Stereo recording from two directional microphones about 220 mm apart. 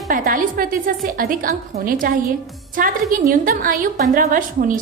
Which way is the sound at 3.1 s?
40° right (ahead or behind).